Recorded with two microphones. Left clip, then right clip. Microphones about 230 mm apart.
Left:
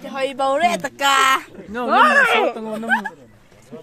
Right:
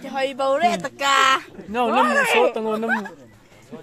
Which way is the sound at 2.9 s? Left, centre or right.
Centre.